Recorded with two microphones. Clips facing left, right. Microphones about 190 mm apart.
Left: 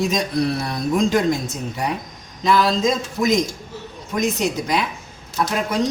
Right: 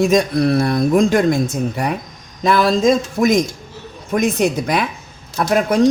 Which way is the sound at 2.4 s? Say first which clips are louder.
Right 3 dB; 55° right (ahead or behind).